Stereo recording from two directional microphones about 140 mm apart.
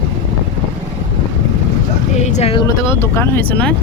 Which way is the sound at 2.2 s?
55° left (ahead or behind).